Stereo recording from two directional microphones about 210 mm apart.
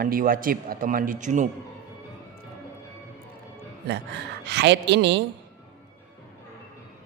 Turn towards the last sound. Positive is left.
turn(degrees=-55)  # may be behind; listen again after turning